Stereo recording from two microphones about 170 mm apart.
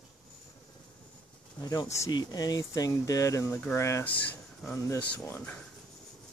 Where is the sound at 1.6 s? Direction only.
25° left (ahead or behind).